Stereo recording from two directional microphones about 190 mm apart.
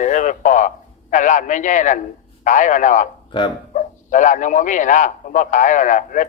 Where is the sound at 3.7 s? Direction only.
40° left (ahead or behind).